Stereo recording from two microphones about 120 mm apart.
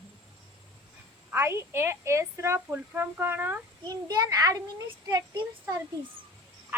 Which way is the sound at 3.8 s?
30° right (ahead or behind).